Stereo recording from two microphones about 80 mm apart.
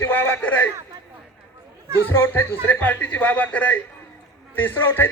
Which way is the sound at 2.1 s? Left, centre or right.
Left.